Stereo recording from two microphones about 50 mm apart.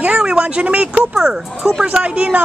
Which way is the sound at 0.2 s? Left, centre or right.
Centre.